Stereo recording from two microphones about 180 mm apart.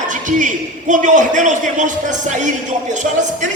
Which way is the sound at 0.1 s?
45° right (ahead or behind).